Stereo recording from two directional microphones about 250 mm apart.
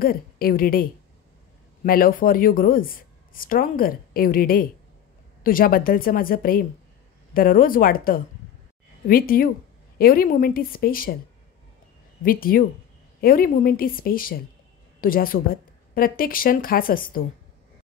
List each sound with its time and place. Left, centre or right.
0.0 s a woman's voice: left
1.9 s a woman's voice: left
12.2 s a woman's voice: left